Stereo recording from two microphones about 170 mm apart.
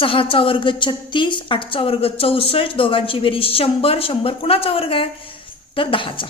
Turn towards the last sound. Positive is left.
turn(degrees=30)  # may be behind; listen again after turning